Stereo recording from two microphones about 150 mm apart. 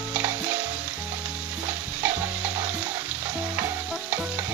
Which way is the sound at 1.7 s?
10° right (ahead or behind).